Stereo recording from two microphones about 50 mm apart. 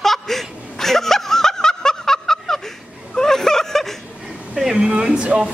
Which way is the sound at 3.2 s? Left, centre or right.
Centre.